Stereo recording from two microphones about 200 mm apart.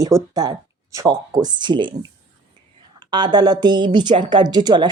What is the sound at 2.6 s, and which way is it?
Whispering, 20° right (ahead or behind).